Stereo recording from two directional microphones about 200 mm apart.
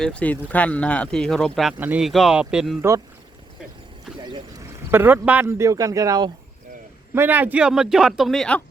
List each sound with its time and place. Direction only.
0.0 s a man's voice: 5° left (ahead or behind)
4.2 s a man's voice: 20° right (ahead or behind); by 8.6 s 5° left (ahead or behind)